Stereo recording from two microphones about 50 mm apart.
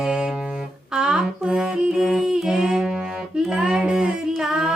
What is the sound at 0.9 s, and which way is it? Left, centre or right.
Humming, centre.